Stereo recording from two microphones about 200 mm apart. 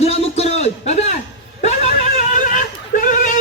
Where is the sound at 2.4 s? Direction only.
40° left (ahead or behind).